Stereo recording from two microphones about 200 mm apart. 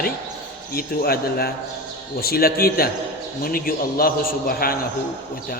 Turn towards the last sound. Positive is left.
turn(degrees=50)  # may be behind; listen again after turning